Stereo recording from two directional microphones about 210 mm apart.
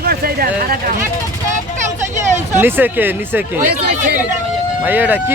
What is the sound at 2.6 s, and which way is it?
Speech, 10° right (ahead or behind).